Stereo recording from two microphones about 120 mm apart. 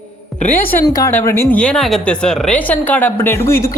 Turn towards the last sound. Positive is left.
turn(degrees=20)  # may be behind; listen again after turning